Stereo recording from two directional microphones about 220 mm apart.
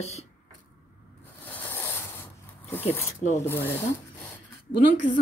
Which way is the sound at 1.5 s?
10° left (ahead or behind).